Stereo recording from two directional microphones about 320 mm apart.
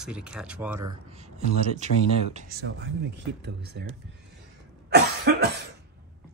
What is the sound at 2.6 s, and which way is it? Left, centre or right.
Speech, right.